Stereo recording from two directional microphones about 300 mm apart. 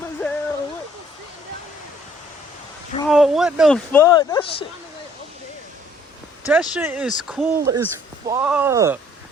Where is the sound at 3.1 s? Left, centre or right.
Centre.